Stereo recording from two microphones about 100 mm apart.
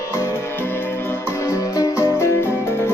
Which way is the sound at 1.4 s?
30° left (ahead or behind).